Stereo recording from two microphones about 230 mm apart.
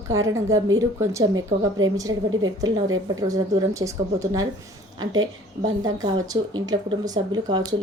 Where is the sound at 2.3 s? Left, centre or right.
Right.